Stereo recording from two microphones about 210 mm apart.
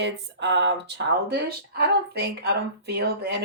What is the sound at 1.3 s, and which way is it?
Speech, 50° right (ahead or behind).